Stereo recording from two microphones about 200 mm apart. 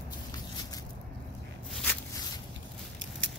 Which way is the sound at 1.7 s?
5° left (ahead or behind).